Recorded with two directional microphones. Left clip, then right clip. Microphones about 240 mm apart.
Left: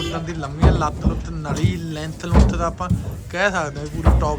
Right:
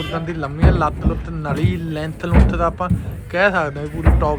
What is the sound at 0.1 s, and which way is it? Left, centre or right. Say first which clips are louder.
Speech: right 3 dB; centre.